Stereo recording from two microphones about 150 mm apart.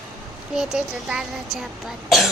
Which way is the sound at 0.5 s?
5° right (ahead or behind).